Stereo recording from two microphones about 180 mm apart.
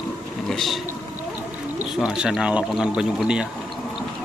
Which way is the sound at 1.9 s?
5° right (ahead or behind).